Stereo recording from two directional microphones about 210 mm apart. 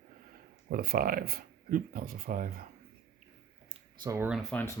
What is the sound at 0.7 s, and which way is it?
Speech, 45° right (ahead or behind).